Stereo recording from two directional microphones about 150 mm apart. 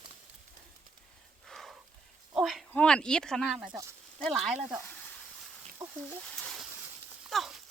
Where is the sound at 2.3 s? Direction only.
Centre (ahead or behind).